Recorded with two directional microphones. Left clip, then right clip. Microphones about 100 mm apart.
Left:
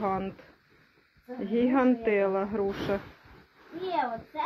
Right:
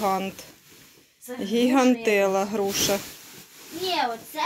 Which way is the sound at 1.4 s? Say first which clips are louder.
Right 4 dB; 50° right (ahead or behind).